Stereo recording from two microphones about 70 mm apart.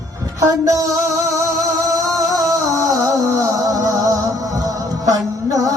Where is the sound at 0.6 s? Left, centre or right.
Right.